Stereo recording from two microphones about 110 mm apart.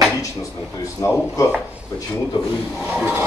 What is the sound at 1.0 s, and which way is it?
Speech, 30° left (ahead or behind).